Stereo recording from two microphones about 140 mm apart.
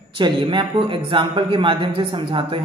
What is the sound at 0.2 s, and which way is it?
A man's voice, 35° right (ahead or behind).